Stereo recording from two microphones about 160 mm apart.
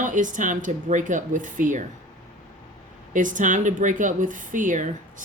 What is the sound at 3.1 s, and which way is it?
Speech, 55° right (ahead or behind).